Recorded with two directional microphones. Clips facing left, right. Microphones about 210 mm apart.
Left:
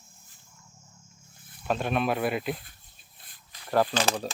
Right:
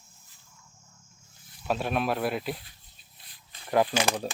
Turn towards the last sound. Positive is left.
turn(degrees=-10)  # may be behind; listen again after turning